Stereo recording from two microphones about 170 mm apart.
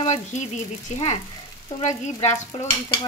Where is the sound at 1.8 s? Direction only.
40° left (ahead or behind).